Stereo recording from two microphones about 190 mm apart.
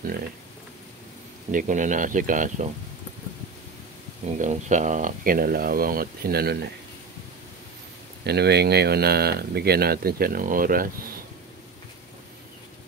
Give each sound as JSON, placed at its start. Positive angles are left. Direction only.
{"t": 1.5, "sound": "speech", "side_deg": -45}
{"t": 4.4, "sound": "speech", "side_deg": -40}
{"t": 8.2, "sound": "speech", "side_deg": -60}